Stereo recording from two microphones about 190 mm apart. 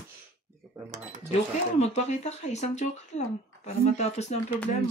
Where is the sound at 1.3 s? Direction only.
35° left (ahead or behind).